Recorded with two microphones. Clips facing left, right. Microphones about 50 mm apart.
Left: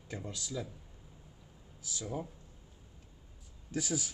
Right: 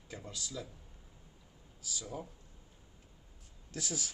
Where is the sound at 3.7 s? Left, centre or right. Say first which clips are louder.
Left 5 dB; centre.